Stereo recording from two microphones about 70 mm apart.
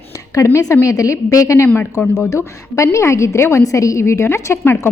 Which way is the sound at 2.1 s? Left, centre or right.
Left.